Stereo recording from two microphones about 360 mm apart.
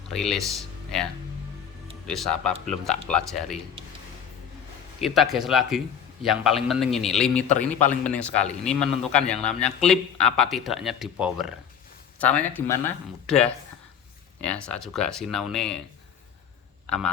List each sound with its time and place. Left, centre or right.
0.1 s speech: centre
2.0 s a man's voice: centre
4.9 s a man's voice: centre